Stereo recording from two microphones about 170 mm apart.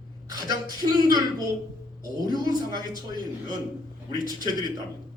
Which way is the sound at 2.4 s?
25° right (ahead or behind).